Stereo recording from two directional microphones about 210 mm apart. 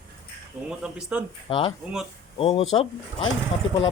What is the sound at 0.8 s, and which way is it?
Speech, 5° right (ahead or behind).